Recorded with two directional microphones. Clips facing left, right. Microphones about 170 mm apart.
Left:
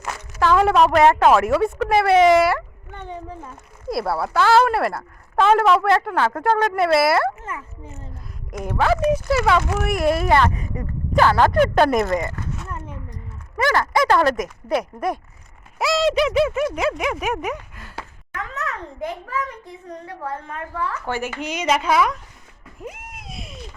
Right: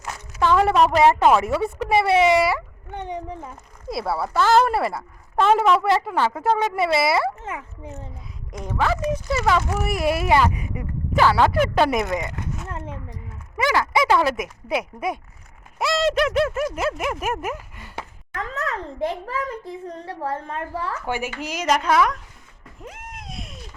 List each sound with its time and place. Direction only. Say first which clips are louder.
0.3 s speech: left 1 dB; centre (ahead or behind)
2.9 s speech: right 3 dB; 15° right (ahead or behind)
3.8 s speech: left 2 dB; centre (ahead or behind)
8.5 s a woman's voice: left 3 dB; 10° left (ahead or behind)
9.8 s speech: left 3 dB; 5° right (ahead or behind)
13.6 s speech: left 1 dB; 10° right (ahead or behind)
18.3 s a child's voice: right 2 dB; 30° right (ahead or behind)
21.1 s speech: right 1 dB; 10° right (ahead or behind)
21.4 s speech: even; centre (ahead or behind)
22.8 s a sound: left 3 dB; 10° left (ahead or behind)